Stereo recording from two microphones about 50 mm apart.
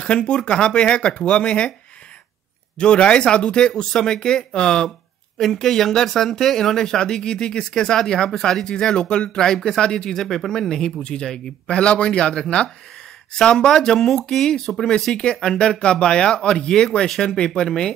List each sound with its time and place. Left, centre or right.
0.0 s speech: left
2.8 s speech: centre